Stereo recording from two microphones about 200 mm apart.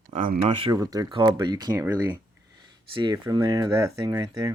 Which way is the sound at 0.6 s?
20° right (ahead or behind).